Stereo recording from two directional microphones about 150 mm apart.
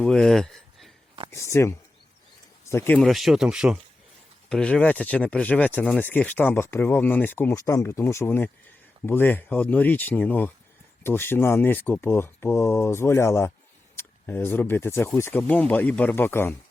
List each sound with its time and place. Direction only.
0.0 s speech: 5° left (ahead or behind)
1.3 s speech: 20° left (ahead or behind)
3.0 s speech: centre (ahead or behind); by 16.6 s 15° left (ahead or behind)